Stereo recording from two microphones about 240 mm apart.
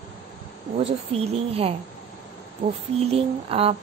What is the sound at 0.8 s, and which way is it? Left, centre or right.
Speech, right.